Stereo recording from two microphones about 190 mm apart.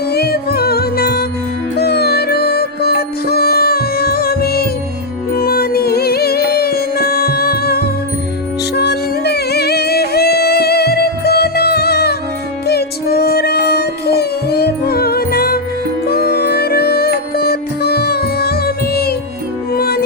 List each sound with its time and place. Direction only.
0.1 s music: 55° left (ahead or behind)